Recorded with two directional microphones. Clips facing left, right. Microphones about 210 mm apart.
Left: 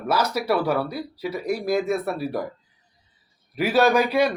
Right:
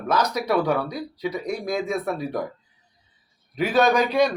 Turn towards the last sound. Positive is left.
turn(degrees=10)  # may be behind; listen again after turning